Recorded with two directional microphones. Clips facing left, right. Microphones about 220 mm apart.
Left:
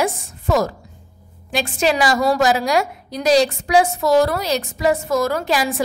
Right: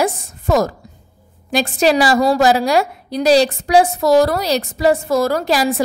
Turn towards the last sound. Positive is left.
turn(degrees=-35)  # may be behind; listen again after turning